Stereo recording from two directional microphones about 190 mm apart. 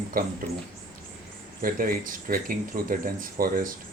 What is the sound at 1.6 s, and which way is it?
Speech, 50° right (ahead or behind).